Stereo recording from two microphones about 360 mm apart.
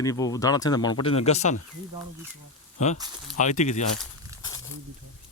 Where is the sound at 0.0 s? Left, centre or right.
Centre.